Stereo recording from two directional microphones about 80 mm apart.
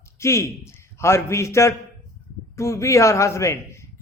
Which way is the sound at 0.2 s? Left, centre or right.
Left.